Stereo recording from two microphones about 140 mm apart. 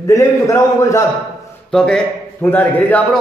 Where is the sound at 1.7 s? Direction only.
5° left (ahead or behind).